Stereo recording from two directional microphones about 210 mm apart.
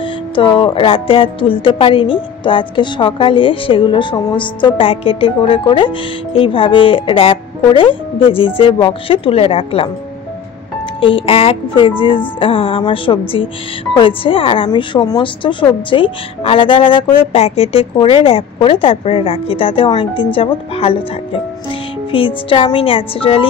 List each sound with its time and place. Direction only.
0.0 s music: 25° left (ahead or behind)
11.0 s music: 25° left (ahead or behind)